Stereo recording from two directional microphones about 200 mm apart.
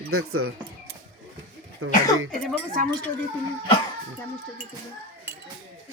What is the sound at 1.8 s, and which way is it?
Speech, 90° right.